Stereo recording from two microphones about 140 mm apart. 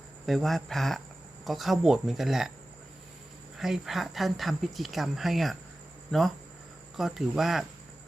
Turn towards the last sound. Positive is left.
turn(degrees=0)  # may be behind; listen again after turning